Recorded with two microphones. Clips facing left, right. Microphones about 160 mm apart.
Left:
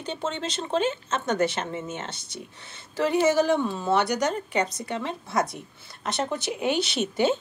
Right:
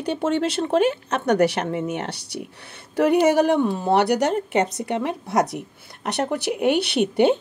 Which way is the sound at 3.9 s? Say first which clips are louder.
Right 4 dB; 70° right (ahead or behind).